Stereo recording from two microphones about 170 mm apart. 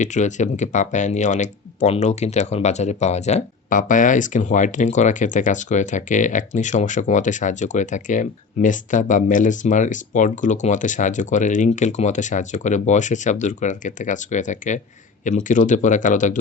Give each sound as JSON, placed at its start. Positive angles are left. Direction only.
{"t": 0.0, "sound": "speech", "side_deg": 45}